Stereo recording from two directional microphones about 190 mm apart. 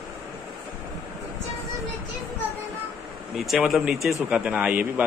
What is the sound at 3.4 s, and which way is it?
A man's voice, centre (ahead or behind).